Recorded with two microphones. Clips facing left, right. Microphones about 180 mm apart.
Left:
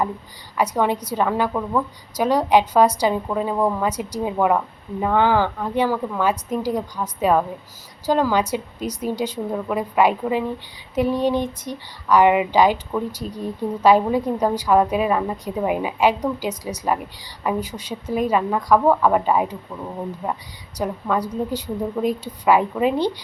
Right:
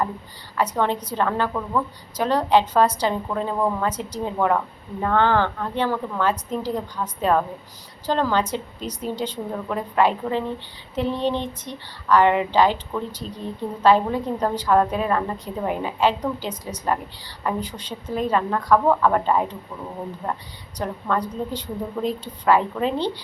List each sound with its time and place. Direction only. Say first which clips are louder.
0.5 s speech: left 2 dB; 10° left (ahead or behind)